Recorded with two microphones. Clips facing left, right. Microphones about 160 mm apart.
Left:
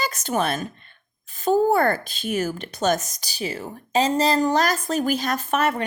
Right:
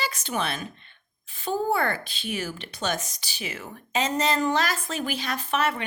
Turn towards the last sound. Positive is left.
turn(degrees=45)  # may be behind; listen again after turning